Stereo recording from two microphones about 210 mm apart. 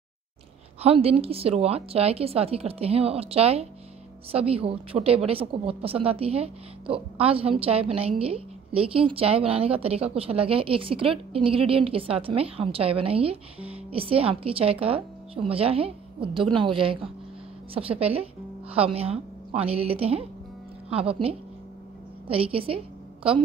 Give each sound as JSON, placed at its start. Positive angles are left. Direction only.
{"t": 0.8, "sound": "a woman's voice", "side_deg": -25}